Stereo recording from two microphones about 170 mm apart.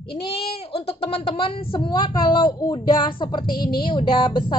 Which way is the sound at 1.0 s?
35° left (ahead or behind).